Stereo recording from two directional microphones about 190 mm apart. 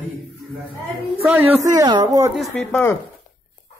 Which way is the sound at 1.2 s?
10° right (ahead or behind).